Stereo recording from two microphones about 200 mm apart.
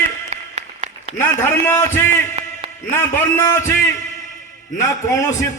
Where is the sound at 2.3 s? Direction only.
30° right (ahead or behind).